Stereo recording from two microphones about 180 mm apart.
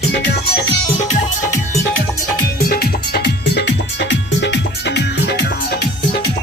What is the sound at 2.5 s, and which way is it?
Music, 55° left (ahead or behind).